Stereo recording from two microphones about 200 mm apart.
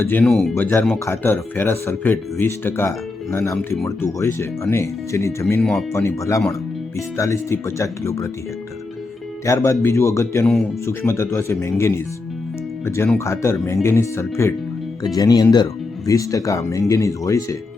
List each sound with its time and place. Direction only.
0.0 s speech: 10° left (ahead or behind)
5.5 s speech: centre (ahead or behind)
5.9 s speech: 15° left (ahead or behind)
9.5 s speech: 15° left (ahead or behind)
10.4 s speech: centre (ahead or behind)
10.8 s speech: 15° left (ahead or behind)